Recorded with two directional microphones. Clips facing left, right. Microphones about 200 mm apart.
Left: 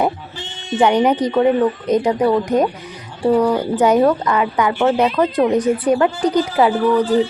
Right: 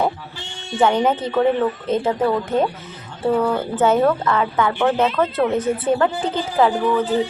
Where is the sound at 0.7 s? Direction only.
15° left (ahead or behind).